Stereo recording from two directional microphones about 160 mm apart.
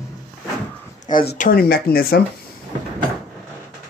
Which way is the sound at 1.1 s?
55° left (ahead or behind).